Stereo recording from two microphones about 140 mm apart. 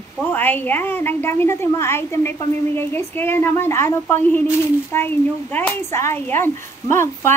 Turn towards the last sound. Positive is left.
turn(degrees=15)  # may be behind; listen again after turning